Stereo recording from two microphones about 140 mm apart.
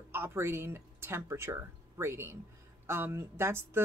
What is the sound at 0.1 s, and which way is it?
Speech, 20° right (ahead or behind).